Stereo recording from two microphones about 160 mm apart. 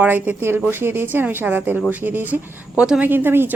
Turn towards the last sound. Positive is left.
turn(degrees=-15)  # may be behind; listen again after turning